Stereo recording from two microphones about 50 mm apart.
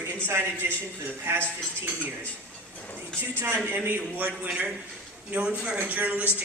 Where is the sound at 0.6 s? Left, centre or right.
Right.